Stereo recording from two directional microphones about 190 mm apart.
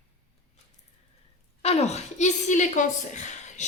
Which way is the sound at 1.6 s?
35° left (ahead or behind).